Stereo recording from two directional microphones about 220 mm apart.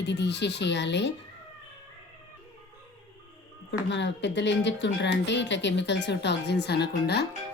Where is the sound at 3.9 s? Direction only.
55° left (ahead or behind).